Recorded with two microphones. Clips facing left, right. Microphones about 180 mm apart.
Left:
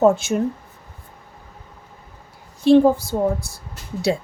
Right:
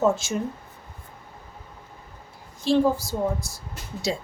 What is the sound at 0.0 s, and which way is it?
Speech, 60° left (ahead or behind).